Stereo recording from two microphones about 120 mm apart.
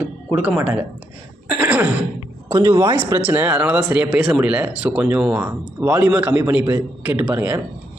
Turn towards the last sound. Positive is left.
turn(degrees=-15)  # may be behind; listen again after turning